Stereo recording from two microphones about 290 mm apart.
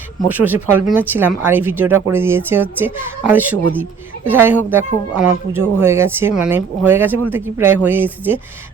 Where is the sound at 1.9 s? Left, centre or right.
Right.